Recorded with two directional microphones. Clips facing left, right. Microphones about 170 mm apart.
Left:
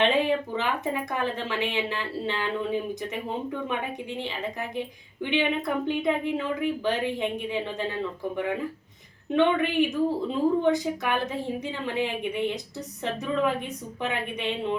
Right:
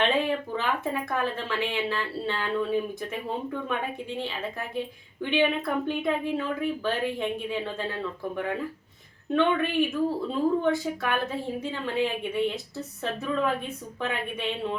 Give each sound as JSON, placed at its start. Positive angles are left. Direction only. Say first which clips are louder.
{"t": 0.0, "sound": "a woman's voice", "louder": "left 2 dB", "side_deg": 20}
{"t": 9.3, "sound": "a woman's voice", "louder": "left 1 dB", "side_deg": 20}